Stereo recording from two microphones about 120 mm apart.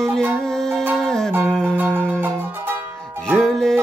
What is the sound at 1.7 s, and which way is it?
Music, 15° right (ahead or behind).